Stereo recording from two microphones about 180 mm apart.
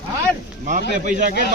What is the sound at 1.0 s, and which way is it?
Speech, 50° right (ahead or behind).